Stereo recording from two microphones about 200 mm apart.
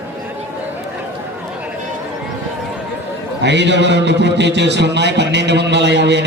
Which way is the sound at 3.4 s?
60° right (ahead or behind).